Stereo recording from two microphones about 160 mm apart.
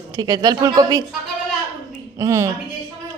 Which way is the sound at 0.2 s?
25° right (ahead or behind).